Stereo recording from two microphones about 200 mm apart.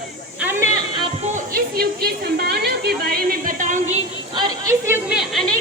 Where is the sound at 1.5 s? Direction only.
50° right (ahead or behind).